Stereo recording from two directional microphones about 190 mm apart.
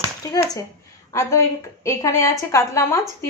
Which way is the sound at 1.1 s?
15° left (ahead or behind).